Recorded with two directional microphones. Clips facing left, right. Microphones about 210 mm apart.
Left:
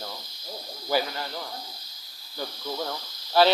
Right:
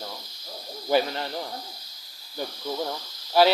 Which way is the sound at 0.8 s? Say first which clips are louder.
Right 4 dB; 25° right (ahead or behind).